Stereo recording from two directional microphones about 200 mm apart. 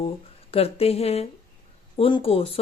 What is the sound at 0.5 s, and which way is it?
Speech, 30° left (ahead or behind).